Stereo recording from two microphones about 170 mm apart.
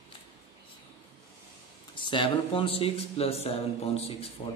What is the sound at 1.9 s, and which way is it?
Speech, 30° left (ahead or behind).